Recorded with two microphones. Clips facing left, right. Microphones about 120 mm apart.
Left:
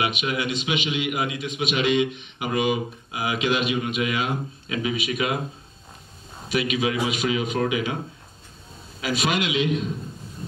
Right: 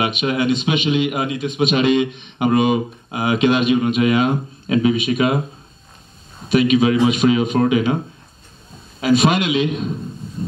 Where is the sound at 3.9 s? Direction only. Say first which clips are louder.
Right 9 dB; 40° right (ahead or behind).